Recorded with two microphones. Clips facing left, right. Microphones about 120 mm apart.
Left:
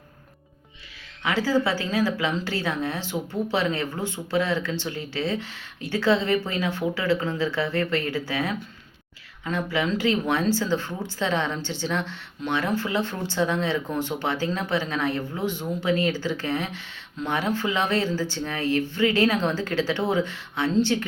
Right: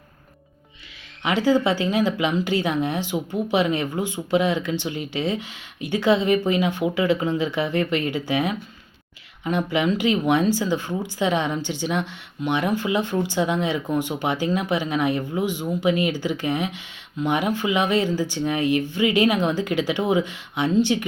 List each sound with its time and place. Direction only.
1.2 s speech: 20° right (ahead or behind)